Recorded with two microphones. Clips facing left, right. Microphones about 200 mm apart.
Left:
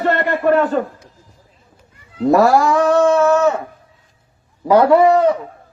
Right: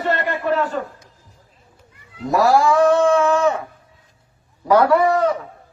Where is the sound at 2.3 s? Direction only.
55° left (ahead or behind).